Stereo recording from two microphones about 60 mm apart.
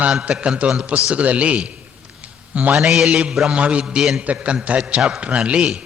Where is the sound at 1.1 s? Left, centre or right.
Right.